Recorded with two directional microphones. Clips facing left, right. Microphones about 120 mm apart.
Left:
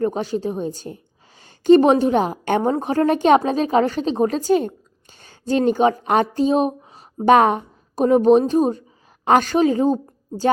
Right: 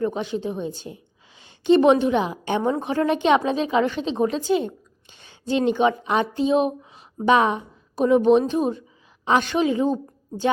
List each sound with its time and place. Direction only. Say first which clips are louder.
0.0 s a woman's voice: left 3 dB; 40° left (ahead or behind)